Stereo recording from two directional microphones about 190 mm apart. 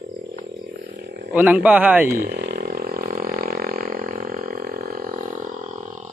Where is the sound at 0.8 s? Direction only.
55° right (ahead or behind).